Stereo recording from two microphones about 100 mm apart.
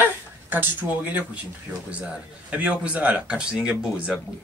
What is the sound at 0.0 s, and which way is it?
Speech, 20° right (ahead or behind).